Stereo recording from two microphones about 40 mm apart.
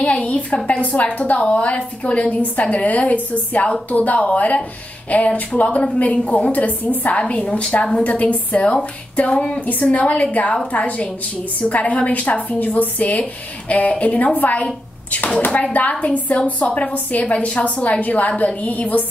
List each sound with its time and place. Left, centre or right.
0.0 s a woman's voice: left